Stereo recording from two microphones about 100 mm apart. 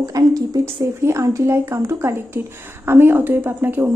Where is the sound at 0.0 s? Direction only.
35° right (ahead or behind).